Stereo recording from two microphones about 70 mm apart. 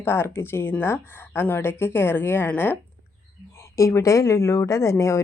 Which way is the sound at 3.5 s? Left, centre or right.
Left.